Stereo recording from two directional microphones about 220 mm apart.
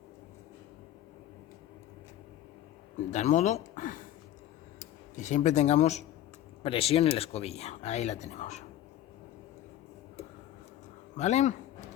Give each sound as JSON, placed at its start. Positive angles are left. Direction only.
{"t": 3.1, "sound": "speech", "side_deg": 30}
{"t": 5.1, "sound": "speech", "side_deg": 35}
{"t": 11.2, "sound": "speech", "side_deg": 30}